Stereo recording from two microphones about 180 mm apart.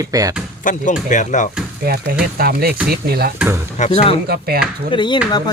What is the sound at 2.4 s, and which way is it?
Speech, 55° right (ahead or behind).